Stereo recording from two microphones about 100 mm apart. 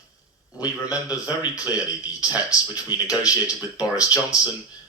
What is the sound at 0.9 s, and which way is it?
Speech, 35° left (ahead or behind).